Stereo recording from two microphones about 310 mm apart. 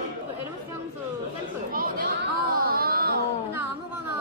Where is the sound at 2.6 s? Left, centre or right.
Right.